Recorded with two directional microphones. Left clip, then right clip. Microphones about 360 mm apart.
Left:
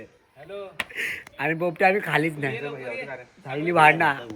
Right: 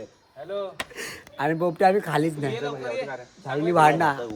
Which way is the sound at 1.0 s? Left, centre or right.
Centre.